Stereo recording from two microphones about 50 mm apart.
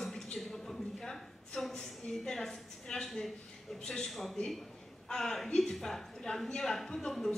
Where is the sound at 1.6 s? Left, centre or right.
Centre.